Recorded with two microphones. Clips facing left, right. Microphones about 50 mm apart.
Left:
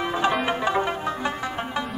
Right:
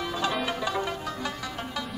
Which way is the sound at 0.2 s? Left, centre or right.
Left.